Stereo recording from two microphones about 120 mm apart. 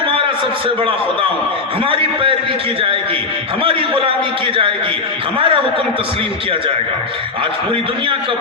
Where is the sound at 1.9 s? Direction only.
50° right (ahead or behind).